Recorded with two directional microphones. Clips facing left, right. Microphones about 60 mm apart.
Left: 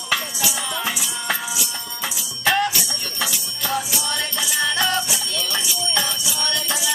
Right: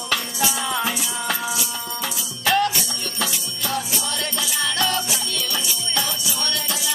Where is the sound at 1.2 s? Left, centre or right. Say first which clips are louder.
Even; centre.